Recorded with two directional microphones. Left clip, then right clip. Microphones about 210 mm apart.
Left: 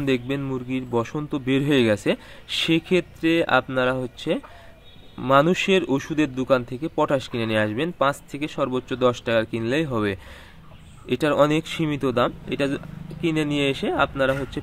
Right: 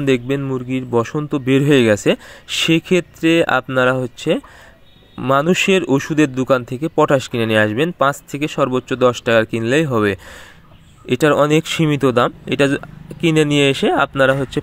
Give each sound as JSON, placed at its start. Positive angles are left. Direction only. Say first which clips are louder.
{"t": 0.0, "sound": "speech", "louder": "right 7 dB", "side_deg": -25}